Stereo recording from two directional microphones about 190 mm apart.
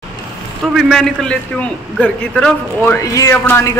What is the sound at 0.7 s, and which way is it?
A man's voice, centre (ahead or behind).